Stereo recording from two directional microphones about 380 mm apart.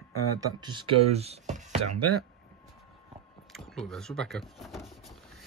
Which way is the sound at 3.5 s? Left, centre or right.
Centre.